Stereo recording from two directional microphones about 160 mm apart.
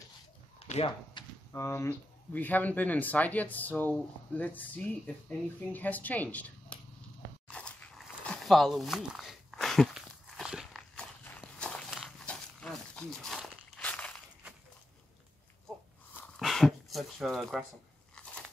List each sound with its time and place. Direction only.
0.7 s speech: 35° left (ahead or behind)
1.5 s speech: 15° left (ahead or behind)
7.4 s a sound: 5° left (ahead or behind)
16.3 s dog: centre (ahead or behind)